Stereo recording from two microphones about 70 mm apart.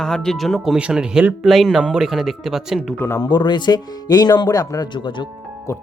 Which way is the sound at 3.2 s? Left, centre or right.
Left.